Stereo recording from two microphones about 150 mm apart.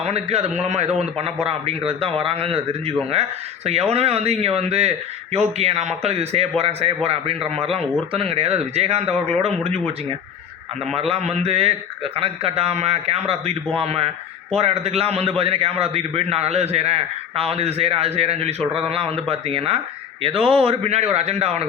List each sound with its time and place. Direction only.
0.0 s a man's voice: 45° right (ahead or behind)
10.9 s a man's voice: 40° right (ahead or behind)